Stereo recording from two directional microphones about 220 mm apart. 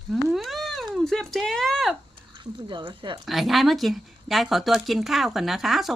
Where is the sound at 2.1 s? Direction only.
20° right (ahead or behind).